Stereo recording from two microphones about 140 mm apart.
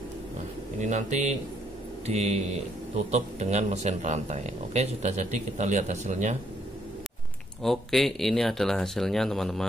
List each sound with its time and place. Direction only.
0.7 s speech: 60° right (ahead or behind)
7.6 s speech: centre (ahead or behind)